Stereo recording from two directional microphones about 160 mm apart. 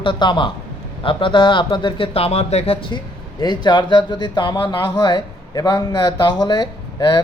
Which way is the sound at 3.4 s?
25° left (ahead or behind).